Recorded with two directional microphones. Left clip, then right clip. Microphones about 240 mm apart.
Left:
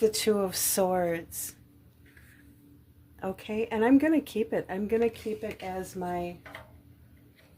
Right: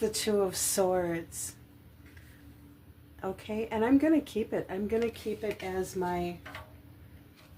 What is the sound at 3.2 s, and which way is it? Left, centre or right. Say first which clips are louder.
A woman's voice: left 3 dB; left.